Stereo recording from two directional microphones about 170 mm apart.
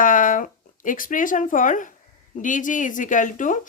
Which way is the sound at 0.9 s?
55° left (ahead or behind).